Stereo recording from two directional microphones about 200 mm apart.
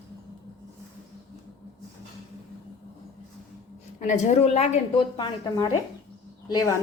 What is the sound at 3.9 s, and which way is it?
A woman's voice, 35° left (ahead or behind).